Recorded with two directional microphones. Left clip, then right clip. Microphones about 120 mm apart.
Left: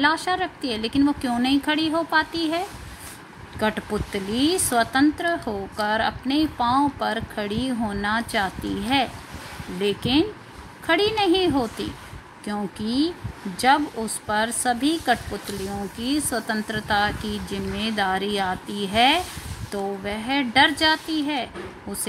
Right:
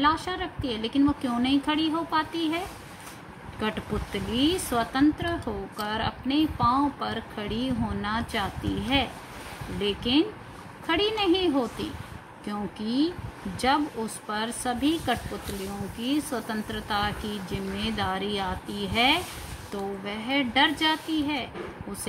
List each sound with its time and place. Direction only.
0.0 s speech: 45° left (ahead or behind)
3.6 s speech: 45° left (ahead or behind)
14.3 s speech: 45° left (ahead or behind)